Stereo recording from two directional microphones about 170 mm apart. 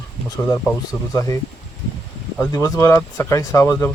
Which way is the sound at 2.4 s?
20° left (ahead or behind).